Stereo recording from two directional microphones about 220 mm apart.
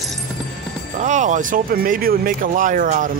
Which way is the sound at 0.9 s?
35° right (ahead or behind).